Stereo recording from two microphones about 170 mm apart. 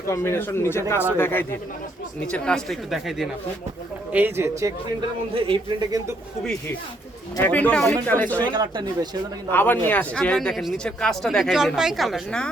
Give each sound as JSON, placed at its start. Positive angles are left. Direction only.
{"t": 0.1, "sound": "speech", "side_deg": 15}
{"t": 4.1, "sound": "speech", "side_deg": -10}
{"t": 5.3, "sound": "a man's voice", "side_deg": -25}
{"t": 7.4, "sound": "speech", "side_deg": 10}
{"t": 8.5, "sound": "a man's voice", "side_deg": -25}
{"t": 9.5, "sound": "speech", "side_deg": 10}